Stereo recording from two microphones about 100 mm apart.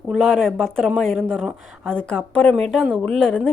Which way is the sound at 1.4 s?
10° right (ahead or behind).